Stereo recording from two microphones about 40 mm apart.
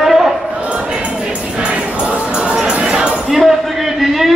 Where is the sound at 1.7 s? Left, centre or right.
Right.